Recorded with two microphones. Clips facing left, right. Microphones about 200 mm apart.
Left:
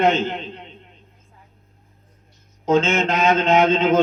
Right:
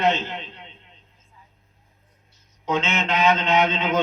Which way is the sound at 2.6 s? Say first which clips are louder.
Left 7 dB; 45° left (ahead or behind).